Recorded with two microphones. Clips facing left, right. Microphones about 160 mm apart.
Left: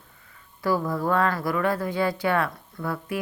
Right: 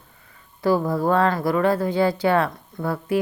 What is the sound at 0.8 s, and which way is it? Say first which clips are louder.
Speech: right 4 dB; 30° right (ahead or behind).